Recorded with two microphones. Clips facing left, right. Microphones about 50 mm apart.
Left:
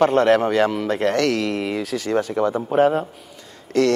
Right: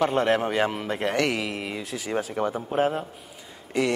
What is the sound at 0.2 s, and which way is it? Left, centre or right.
Speech, left.